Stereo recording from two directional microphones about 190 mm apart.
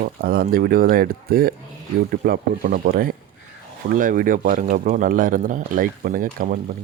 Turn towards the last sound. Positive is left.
turn(degrees=-45)  # may be behind; listen again after turning